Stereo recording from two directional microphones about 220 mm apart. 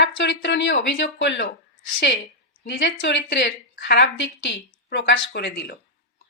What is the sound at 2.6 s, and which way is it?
Speech, 50° left (ahead or behind).